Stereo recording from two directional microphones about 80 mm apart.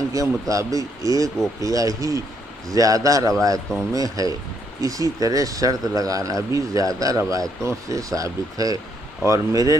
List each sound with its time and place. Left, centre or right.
0.1 s speech: right